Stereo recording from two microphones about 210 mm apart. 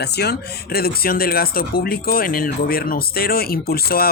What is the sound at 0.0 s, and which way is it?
Speech, 50° left (ahead or behind).